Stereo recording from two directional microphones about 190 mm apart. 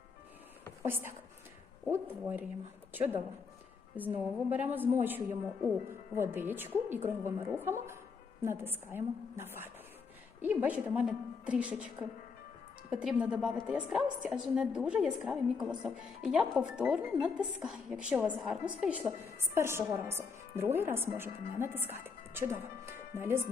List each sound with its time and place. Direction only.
0.9 s a woman's voice: 10° right (ahead or behind)
3.9 s a woman's voice: 10° right (ahead or behind)